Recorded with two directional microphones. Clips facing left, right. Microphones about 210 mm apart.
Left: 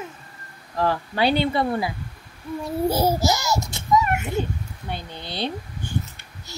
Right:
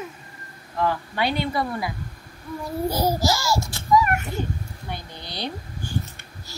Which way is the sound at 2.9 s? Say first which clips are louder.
Left 1 dB; 25° left (ahead or behind).